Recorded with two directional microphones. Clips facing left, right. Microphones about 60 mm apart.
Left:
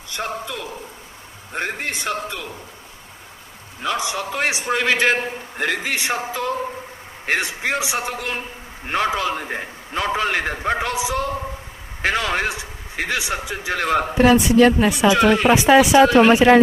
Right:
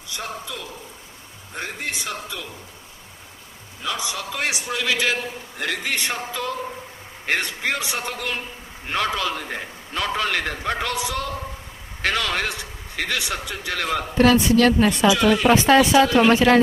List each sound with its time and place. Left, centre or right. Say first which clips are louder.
0.1 s a man's voice: left 4 dB; left
3.8 s a man's voice: left 5 dB; left
5.8 s a man's voice: left 3 dB; left
6.3 s a man's voice: left 4 dB; left
7.8 s a man's voice: left 4 dB; centre
8.1 s a man's voice: left 2 dB; left
13.8 s a man's voice: left 7 dB; left
14.1 s speech: left 1 dB; centre
15.0 s a man's voice: left 4 dB; left
15.4 s speech: even; centre